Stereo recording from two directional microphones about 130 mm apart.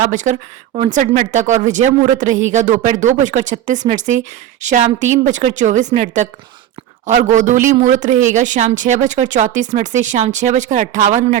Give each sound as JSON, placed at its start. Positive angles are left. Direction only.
{"t": 0.1, "sound": "speech", "side_deg": -70}